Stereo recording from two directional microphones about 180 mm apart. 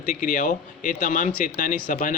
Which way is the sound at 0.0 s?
45° left (ahead or behind).